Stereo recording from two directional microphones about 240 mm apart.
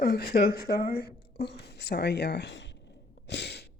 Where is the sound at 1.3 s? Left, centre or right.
Left.